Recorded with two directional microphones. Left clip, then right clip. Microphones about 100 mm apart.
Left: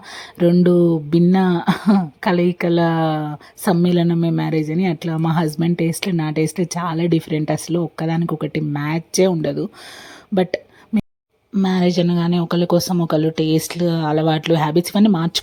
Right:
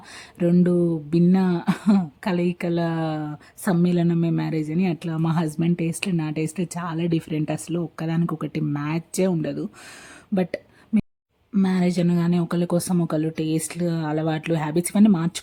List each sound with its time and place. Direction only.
0.6 s a woman's voice: 15° left (ahead or behind)